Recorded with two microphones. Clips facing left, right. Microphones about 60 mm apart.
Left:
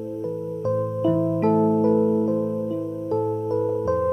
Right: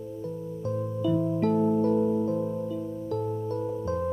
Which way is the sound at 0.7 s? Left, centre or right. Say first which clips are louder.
Left 6 dB; left.